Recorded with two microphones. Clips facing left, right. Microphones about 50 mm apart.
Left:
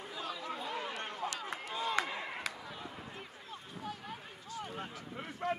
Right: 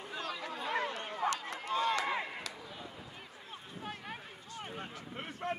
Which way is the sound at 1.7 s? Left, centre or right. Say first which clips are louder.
Right 6 dB; right.